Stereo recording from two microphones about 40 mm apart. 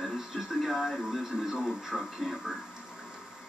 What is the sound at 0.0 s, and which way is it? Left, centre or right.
Television, centre.